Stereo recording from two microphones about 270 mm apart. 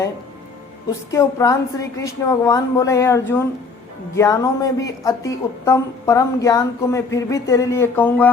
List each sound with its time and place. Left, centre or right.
1.1 s a woman's voice: centre